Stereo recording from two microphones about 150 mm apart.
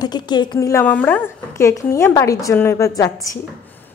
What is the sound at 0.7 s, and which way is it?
A woman's voice, 10° left (ahead or behind).